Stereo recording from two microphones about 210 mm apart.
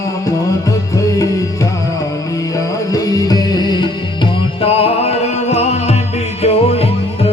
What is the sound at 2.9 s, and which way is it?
Music, 15° left (ahead or behind).